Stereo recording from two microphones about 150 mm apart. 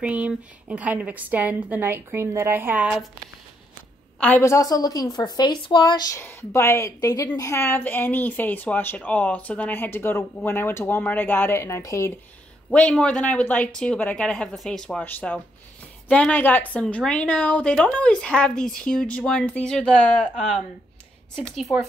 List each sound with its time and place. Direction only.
0.0 s a woman's voice: 10° right (ahead or behind)
4.2 s a woman's voice: 15° left (ahead or behind)
12.7 s a woman's voice: 5° left (ahead or behind)